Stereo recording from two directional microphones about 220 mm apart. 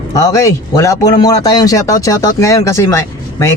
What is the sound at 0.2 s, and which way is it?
Speech, 15° left (ahead or behind).